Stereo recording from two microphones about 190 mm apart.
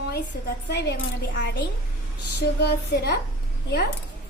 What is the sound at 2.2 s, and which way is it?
Speech, 60° left (ahead or behind).